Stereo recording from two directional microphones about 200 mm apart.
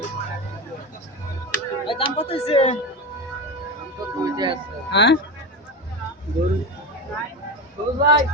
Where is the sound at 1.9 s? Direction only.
30° left (ahead or behind).